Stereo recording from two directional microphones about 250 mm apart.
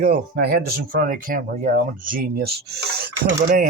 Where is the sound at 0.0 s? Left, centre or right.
Right.